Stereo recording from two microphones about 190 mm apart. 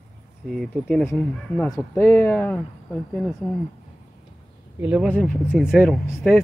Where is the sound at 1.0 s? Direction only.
15° left (ahead or behind).